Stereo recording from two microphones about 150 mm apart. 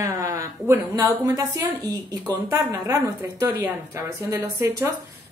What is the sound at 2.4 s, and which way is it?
Speech, 20° right (ahead or behind).